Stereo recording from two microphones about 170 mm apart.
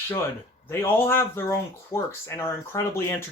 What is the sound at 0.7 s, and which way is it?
Speech, 15° left (ahead or behind).